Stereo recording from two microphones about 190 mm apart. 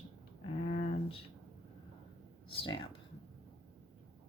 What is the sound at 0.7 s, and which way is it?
Speech, 35° left (ahead or behind).